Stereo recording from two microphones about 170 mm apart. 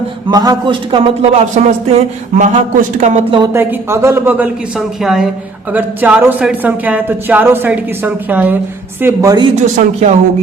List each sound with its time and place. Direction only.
0.3 s speech: 25° right (ahead or behind); by 3.2 s 45° right (ahead or behind)
3.5 s a woman's voice: 15° right (ahead or behind)
9.6 s speech: 40° right (ahead or behind)